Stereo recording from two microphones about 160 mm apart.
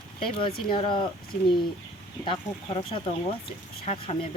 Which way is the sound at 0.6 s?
30° left (ahead or behind).